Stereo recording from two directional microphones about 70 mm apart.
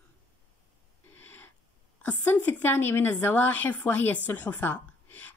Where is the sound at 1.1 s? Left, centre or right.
Left.